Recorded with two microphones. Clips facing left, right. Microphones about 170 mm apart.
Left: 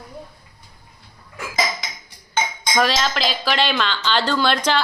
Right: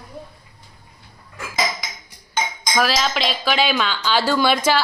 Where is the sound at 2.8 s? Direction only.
Centre (ahead or behind).